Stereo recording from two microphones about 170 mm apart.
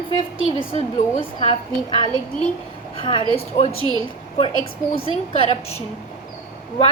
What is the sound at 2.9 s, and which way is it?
A woman's voice, 30° left (ahead or behind).